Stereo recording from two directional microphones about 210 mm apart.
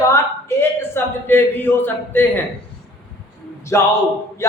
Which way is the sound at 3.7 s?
15° left (ahead or behind).